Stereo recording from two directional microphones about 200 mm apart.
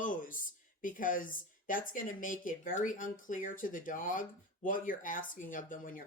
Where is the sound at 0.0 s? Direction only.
40° left (ahead or behind).